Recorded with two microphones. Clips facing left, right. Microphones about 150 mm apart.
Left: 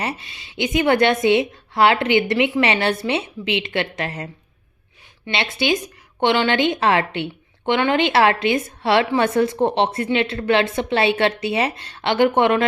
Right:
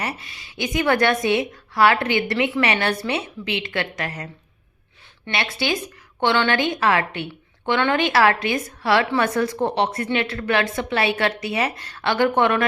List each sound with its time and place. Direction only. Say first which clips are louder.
0.0 s a woman's voice: left 2 dB; 25° left (ahead or behind)
5.3 s a woman's voice: left 3 dB; 20° left (ahead or behind)